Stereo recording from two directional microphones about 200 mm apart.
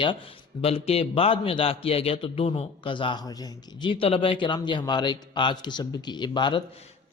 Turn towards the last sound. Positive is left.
turn(degrees=20)  # may be behind; listen again after turning